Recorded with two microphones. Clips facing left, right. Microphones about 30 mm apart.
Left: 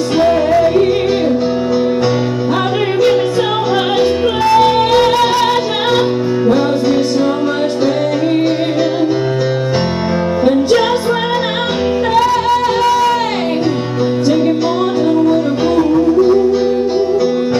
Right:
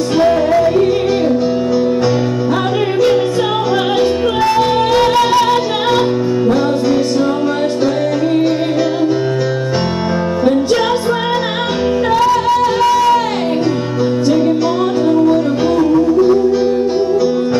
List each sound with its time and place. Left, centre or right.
0.2 s music: centre
4.0 s music: centre